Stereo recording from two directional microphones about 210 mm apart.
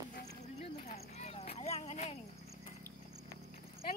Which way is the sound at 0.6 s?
30° left (ahead or behind).